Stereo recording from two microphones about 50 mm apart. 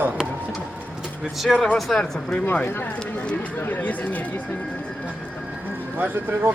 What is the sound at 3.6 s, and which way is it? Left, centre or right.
Speech, left.